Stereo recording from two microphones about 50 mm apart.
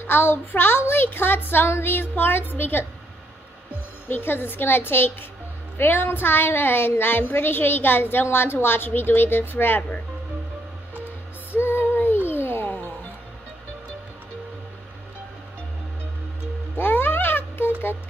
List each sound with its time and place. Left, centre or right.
0.0 s a woman's voice: left
4.1 s a woman's voice: left
11.5 s music: left
12.3 s a sound: left
16.7 s music: left